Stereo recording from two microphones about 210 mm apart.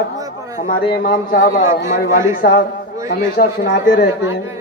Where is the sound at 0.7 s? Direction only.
45° left (ahead or behind).